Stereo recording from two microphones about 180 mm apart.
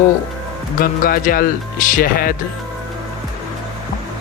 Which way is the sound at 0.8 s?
50° left (ahead or behind).